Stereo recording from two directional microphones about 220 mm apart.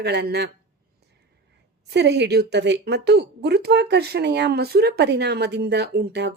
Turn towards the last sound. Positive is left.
turn(degrees=-50)  # may be behind; listen again after turning